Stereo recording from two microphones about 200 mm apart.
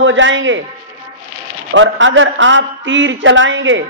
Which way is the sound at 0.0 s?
70° right (ahead or behind).